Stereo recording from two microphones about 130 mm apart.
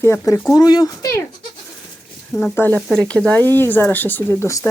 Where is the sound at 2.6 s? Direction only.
10° left (ahead or behind).